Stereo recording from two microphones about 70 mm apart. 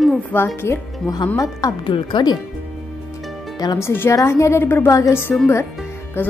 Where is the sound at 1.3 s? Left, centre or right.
Left.